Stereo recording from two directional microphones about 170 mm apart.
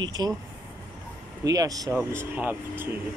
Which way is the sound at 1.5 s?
20° right (ahead or behind).